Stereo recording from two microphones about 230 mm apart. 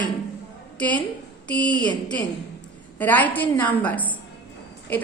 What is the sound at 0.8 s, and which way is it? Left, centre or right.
A woman's voice, centre.